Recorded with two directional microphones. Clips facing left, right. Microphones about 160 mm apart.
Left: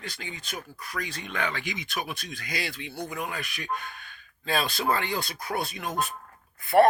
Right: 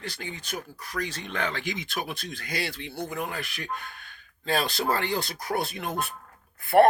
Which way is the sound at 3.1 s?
50° right (ahead or behind).